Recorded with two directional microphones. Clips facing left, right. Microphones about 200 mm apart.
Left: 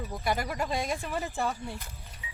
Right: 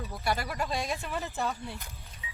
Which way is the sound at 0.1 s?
15° left (ahead or behind).